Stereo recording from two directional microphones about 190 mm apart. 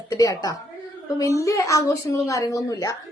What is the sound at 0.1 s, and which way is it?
A woman's voice, 20° left (ahead or behind).